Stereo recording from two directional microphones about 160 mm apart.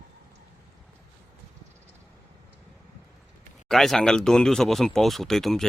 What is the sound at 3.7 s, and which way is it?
Speech, centre (ahead or behind).